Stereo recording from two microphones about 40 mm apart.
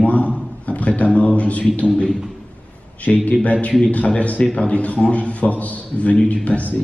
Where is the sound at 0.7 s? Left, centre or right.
Left.